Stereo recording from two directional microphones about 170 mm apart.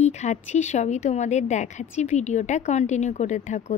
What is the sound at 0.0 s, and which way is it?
A woman's voice, 40° left (ahead or behind).